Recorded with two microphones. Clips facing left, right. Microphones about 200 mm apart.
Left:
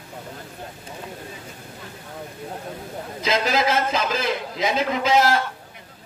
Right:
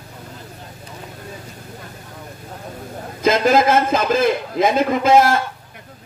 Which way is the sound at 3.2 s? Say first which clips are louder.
Right 7 dB; 50° right (ahead or behind).